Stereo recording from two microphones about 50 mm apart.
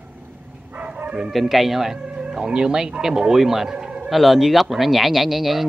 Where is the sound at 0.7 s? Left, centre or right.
Right.